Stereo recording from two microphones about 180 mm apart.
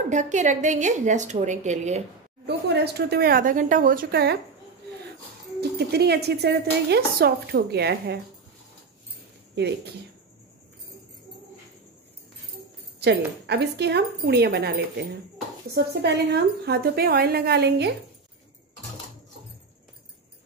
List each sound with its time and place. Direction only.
0.1 s a woman's voice: 40° right (ahead or behind)
2.4 s speech: 65° right (ahead or behind)
5.6 s speech: 65° right (ahead or behind)
13.0 s speech: 65° right (ahead or behind)